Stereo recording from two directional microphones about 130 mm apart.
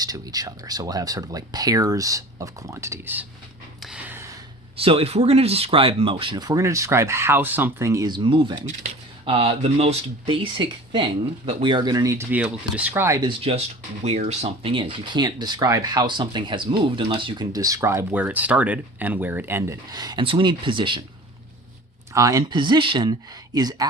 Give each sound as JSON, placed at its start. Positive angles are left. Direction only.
{"t": 0.0, "sound": "speech", "side_deg": -30}
{"t": 3.8, "sound": "gasp", "side_deg": -10}
{"t": 4.8, "sound": "speech", "side_deg": -45}
{"t": 12.3, "sound": "speech", "side_deg": -10}
{"t": 13.2, "sound": "speech", "side_deg": -50}
{"t": 22.1, "sound": "speech", "side_deg": -25}